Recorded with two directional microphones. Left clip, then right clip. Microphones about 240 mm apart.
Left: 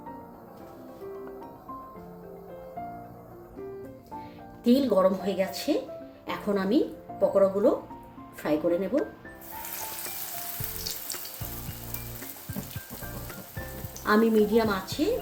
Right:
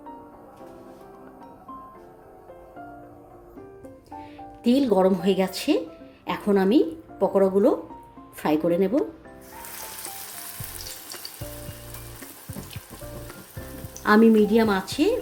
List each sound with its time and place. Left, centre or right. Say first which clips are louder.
4.6 s speech: right 2 dB; right
14.0 s speech: right 5 dB; right